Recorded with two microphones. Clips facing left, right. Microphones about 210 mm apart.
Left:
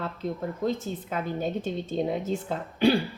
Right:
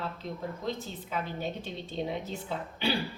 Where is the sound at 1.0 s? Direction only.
50° left (ahead or behind).